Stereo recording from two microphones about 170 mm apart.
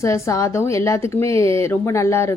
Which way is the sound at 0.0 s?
15° left (ahead or behind).